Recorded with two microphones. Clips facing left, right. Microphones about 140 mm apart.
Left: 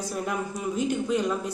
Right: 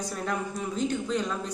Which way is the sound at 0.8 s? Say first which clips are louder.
Left 3 dB; 10° left (ahead or behind).